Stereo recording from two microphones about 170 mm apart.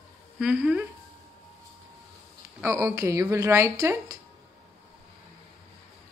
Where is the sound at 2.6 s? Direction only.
15° right (ahead or behind).